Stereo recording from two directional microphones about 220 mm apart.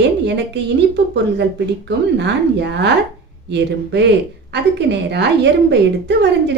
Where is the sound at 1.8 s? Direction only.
50° right (ahead or behind).